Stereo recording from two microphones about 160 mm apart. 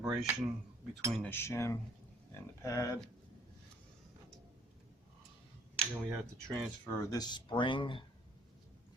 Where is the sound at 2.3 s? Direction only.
20° left (ahead or behind).